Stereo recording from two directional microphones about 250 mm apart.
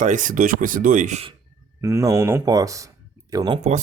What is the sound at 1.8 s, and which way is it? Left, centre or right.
Speech, centre.